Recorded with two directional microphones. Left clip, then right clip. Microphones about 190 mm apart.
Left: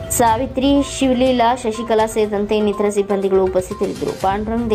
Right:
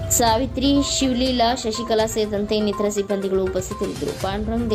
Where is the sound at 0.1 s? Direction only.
15° right (ahead or behind).